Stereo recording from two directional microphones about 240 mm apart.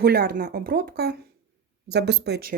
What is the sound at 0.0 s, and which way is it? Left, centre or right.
A child's voice, right.